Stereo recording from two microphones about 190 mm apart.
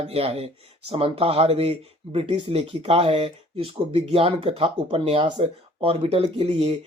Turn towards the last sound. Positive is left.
turn(degrees=-30)  # may be behind; listen again after turning